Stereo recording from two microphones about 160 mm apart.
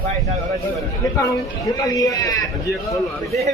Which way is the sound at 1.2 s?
20° left (ahead or behind).